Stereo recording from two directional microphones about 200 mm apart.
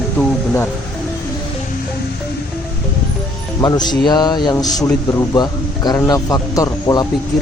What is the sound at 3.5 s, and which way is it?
Speech, 20° left (ahead or behind).